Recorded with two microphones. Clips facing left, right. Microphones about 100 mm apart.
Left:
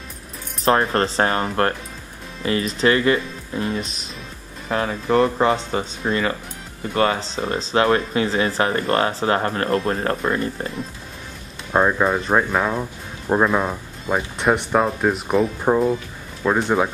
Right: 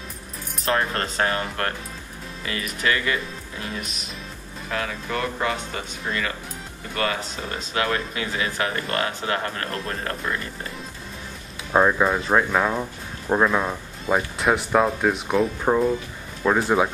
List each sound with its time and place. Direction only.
0.7 s speech: 30° left (ahead or behind)
11.7 s speech: 5° left (ahead or behind)